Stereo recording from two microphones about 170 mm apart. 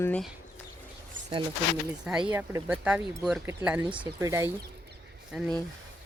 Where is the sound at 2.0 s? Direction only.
5° right (ahead or behind).